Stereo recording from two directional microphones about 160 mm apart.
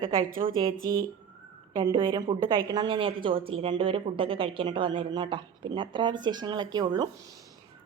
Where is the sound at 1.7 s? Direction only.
25° right (ahead or behind).